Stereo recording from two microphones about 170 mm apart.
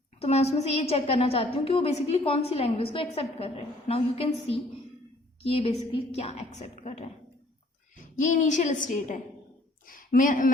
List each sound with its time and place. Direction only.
0.2 s a woman's voice: 35° left (ahead or behind)
5.4 s a woman's voice: 35° left (ahead or behind); by 10.5 s 55° left (ahead or behind)